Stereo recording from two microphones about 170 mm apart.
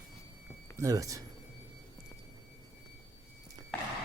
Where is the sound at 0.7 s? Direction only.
20° right (ahead or behind).